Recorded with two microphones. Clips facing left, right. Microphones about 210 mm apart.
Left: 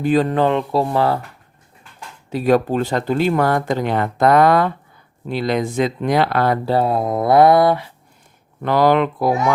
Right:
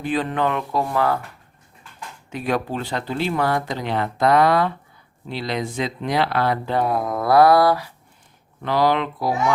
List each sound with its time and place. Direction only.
0.0 s speech: 40° left (ahead or behind)
2.3 s speech: 40° left (ahead or behind)
6.7 s speech: 30° left (ahead or behind)
8.6 s speech: 50° left (ahead or behind)